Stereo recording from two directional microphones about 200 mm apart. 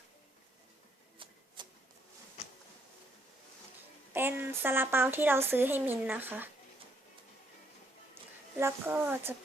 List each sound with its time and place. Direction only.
1.6 s a sound: 20° right (ahead or behind)
4.1 s speech: 10° right (ahead or behind)
8.5 s speech: 10° right (ahead or behind)